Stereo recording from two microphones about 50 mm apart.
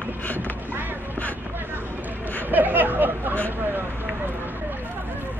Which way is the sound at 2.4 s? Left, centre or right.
Right.